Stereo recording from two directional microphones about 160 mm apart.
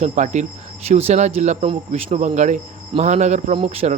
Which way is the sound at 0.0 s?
45° right (ahead or behind).